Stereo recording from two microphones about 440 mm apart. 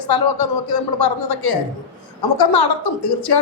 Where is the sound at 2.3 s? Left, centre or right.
Left.